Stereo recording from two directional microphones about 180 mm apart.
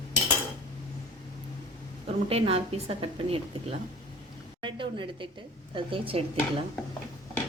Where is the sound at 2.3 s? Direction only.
30° right (ahead or behind).